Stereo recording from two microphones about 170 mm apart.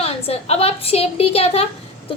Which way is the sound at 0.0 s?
35° left (ahead or behind).